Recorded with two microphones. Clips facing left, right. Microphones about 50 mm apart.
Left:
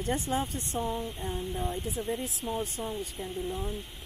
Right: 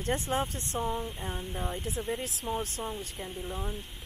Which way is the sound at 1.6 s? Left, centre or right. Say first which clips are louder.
Left 1 dB; right.